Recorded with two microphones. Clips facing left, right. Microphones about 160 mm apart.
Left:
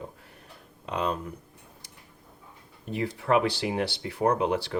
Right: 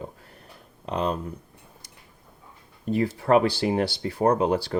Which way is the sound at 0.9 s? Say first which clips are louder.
Right 3 dB; 35° right (ahead or behind).